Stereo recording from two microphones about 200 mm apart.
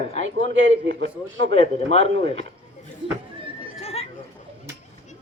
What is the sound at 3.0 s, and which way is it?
Speech, 25° right (ahead or behind).